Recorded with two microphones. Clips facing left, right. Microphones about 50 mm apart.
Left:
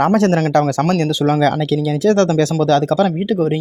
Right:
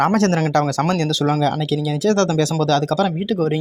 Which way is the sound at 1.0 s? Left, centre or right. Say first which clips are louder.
Left 3 dB; left.